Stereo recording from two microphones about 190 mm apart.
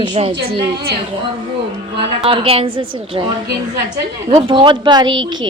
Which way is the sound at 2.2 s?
30° right (ahead or behind).